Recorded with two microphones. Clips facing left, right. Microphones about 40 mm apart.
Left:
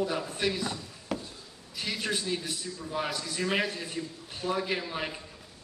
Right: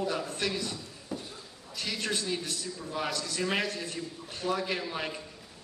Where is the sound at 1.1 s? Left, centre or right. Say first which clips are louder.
Left 4 dB; left.